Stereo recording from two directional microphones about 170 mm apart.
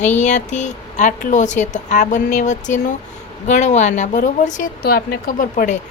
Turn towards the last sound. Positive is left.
turn(degrees=50)  # may be behind; listen again after turning